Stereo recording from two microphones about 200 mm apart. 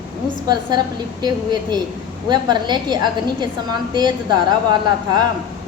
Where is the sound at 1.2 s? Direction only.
20° right (ahead or behind).